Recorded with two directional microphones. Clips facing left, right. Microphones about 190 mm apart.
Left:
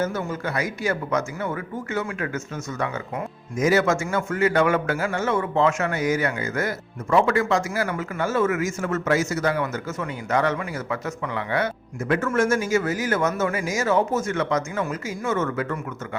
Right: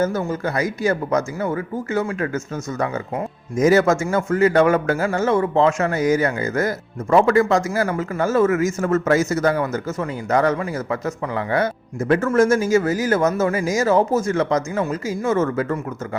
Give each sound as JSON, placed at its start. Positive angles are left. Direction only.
{"t": 0.0, "sound": "a man's voice", "side_deg": -40}